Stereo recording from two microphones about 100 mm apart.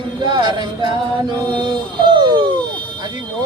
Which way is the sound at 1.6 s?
55° right (ahead or behind).